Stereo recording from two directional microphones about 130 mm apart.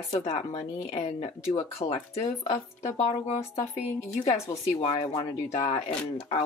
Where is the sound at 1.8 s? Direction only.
40° left (ahead or behind).